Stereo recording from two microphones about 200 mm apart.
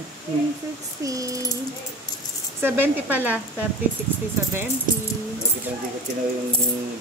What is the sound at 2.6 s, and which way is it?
Speech, 10° right (ahead or behind).